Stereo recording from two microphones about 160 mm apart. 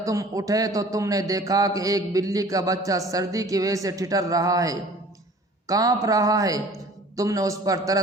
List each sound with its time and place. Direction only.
0.0 s a man's voice: 20° right (ahead or behind)